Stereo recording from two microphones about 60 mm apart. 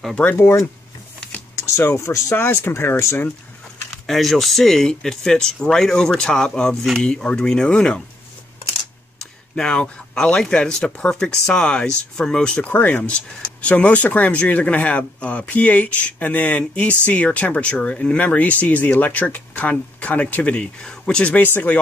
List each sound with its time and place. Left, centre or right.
0.4 s speech: left
1.5 s a sound: left
2.0 s speech: left
2.3 s speech: left
4.1 s speech: centre
9.6 s speech: centre
12.7 s speech: left